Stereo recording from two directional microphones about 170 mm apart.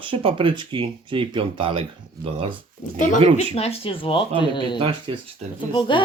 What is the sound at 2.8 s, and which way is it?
Speech, 50° left (ahead or behind).